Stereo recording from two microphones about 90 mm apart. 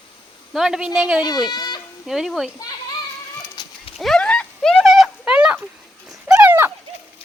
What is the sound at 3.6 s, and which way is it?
Horse, 50° left (ahead or behind).